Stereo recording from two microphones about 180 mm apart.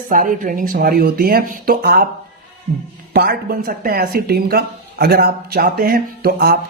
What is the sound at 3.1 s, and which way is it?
Speech, 60° right (ahead or behind).